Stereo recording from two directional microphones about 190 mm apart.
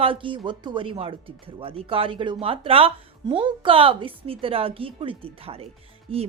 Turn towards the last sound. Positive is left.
turn(degrees=-30)  # may be behind; listen again after turning